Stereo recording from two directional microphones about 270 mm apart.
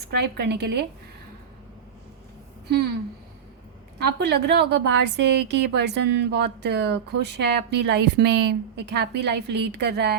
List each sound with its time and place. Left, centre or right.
0.1 s a woman's voice: right
2.6 s speech: right
3.9 s a woman's voice: right